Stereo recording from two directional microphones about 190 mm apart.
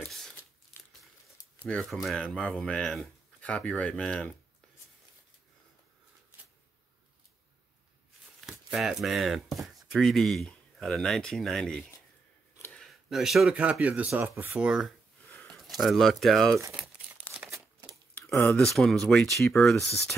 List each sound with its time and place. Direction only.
0.0 s crumpling: centre (ahead or behind)
1.6 s speech: 5° left (ahead or behind)
8.5 s speech: centre (ahead or behind)
15.2 s a sound: 10° left (ahead or behind)
15.8 s speech: centre (ahead or behind)
17.4 s crumpling: 15° right (ahead or behind)
18.1 s speech: 10° left (ahead or behind)